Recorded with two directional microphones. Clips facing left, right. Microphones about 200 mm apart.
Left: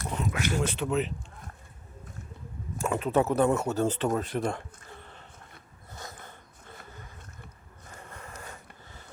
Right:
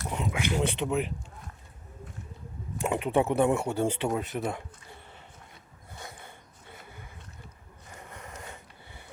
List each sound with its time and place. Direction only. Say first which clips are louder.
0.1 s speech: even; 15° right (ahead or behind)
2.7 s speech: even; 20° right (ahead or behind)
6.2 s a sound: left 1 dB; 15° right (ahead or behind)